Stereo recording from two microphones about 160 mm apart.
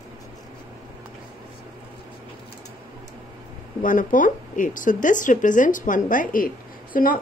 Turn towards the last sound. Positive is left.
turn(degrees=60)  # may be behind; listen again after turning